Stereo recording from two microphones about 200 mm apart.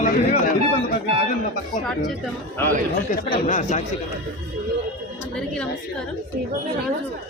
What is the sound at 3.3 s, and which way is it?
Speech, 35° left (ahead or behind).